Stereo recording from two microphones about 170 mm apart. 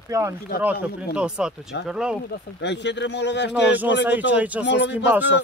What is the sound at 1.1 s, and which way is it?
Speech, 5° right (ahead or behind).